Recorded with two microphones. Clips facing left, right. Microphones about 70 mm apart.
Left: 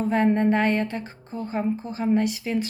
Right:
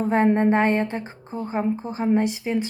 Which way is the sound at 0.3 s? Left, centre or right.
Right.